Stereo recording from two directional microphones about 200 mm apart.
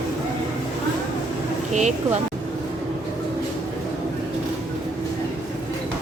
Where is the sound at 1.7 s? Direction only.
35° right (ahead or behind).